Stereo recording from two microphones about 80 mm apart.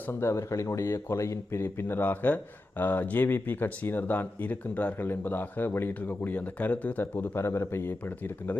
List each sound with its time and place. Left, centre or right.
0.1 s speech: left
1.6 s speech: left